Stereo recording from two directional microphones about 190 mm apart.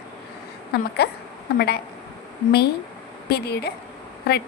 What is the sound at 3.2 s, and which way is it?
Speech, 60° left (ahead or behind).